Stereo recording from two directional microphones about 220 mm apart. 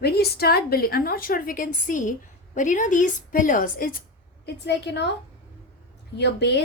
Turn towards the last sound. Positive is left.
turn(degrees=50)  # may be behind; listen again after turning